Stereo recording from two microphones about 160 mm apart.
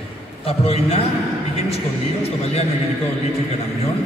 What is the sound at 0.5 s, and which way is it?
Speech, 40° left (ahead or behind).